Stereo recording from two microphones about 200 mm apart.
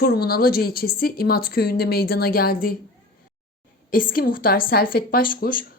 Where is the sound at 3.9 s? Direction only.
45° left (ahead or behind).